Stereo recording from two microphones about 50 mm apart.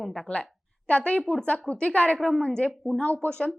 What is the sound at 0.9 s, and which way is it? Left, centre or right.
A woman's voice, left.